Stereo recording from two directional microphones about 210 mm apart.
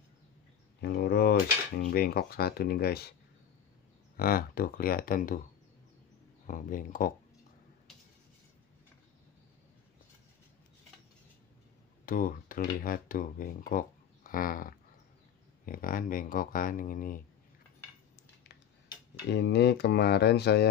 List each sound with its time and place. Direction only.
0.7 s speech: 50° left (ahead or behind)
4.2 s speech: 45° left (ahead or behind)
6.4 s speech: 40° left (ahead or behind)
12.1 s speech: 40° left (ahead or behind)
19.3 s speech: 55° left (ahead or behind)